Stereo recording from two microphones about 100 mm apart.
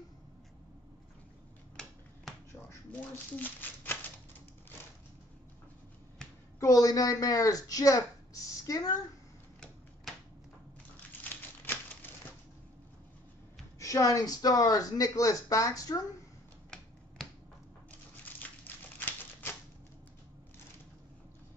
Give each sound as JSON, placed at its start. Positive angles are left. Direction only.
{"t": 2.3, "sound": "finger snapping", "side_deg": 0}
{"t": 2.9, "sound": "speech", "side_deg": 15}
{"t": 6.6, "sound": "a woman's voice", "side_deg": 35}
{"t": 11.2, "sound": "typewriter", "side_deg": 20}
{"t": 13.7, "sound": "speech", "side_deg": 35}
{"t": 16.7, "sound": "finger snapping", "side_deg": 5}
{"t": 18.2, "sound": "a sound", "side_deg": 15}